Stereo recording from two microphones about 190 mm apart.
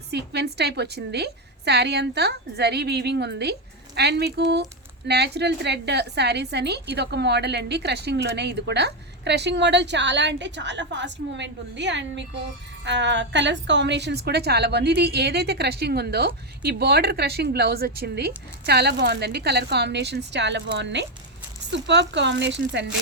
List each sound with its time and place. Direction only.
0.1 s speech: 60° right (ahead or behind)